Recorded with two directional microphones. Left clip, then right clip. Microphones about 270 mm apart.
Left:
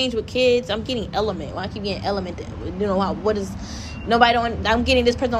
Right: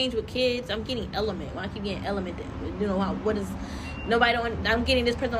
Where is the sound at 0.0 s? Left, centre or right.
Centre.